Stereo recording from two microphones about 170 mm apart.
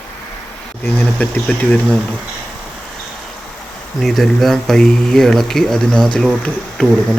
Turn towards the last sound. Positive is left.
turn(degrees=5)  # may be behind; listen again after turning